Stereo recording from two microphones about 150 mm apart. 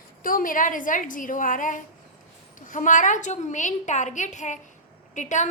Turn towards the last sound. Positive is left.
turn(degrees=55)  # may be behind; listen again after turning